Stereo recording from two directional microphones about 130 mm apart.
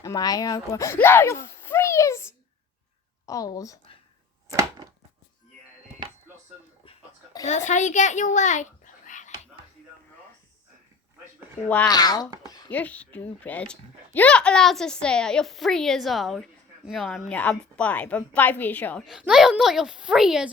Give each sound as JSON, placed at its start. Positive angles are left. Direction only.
{"t": 0.0, "sound": "speech", "side_deg": 30}
{"t": 1.0, "sound": "a sound", "side_deg": 15}
{"t": 3.2, "sound": "speech", "side_deg": 25}
{"t": 7.4, "sound": "a child's voice", "side_deg": 65}
{"t": 11.9, "sound": "speech", "side_deg": 30}
{"t": 12.5, "sound": "a sound", "side_deg": 30}
{"t": 12.7, "sound": "a child's voice", "side_deg": 10}
{"t": 19.2, "sound": "a woman's voice", "side_deg": -5}